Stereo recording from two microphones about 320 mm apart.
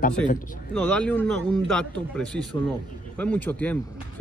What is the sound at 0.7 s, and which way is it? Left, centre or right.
Speech, centre.